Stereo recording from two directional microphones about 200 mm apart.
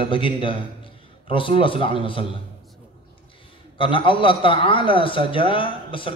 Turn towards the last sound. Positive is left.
turn(degrees=25)  # may be behind; listen again after turning